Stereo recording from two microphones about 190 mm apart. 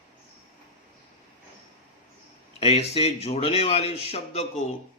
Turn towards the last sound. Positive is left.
turn(degrees=35)  # may be behind; listen again after turning